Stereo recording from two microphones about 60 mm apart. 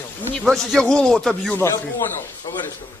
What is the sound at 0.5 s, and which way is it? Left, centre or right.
Speech, centre.